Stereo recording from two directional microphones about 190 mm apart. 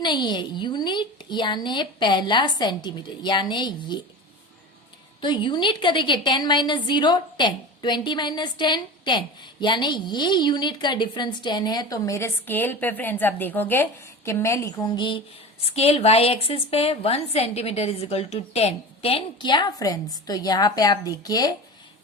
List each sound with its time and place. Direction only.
0.0 s a woman's voice: 25° left (ahead or behind)
5.2 s a woman's voice: 25° left (ahead or behind)